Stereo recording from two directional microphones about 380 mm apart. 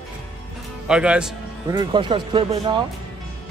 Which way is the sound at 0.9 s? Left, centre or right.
Centre.